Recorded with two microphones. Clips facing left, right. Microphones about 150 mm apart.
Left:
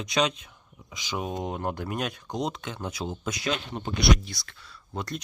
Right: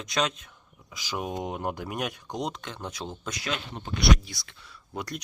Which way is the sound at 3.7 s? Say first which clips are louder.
Left 5 dB; 50° left (ahead or behind).